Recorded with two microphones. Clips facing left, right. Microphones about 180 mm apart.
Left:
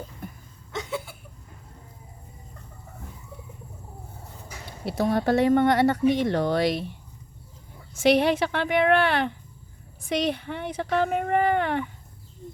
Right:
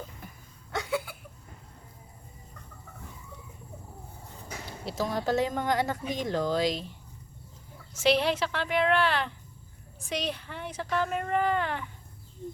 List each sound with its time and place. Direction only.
4.9 s speech: 60° left (ahead or behind)
8.0 s speech: 55° left (ahead or behind)